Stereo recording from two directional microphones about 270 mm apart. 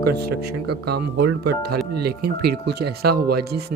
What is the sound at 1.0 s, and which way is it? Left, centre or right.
Speech, right.